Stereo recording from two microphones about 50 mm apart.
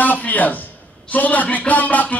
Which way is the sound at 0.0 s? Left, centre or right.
Left.